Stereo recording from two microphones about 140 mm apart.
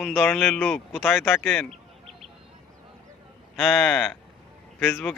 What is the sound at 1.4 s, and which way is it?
Speech, centre (ahead or behind).